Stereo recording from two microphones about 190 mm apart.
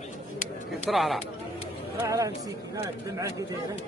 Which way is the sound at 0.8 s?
Centre (ahead or behind).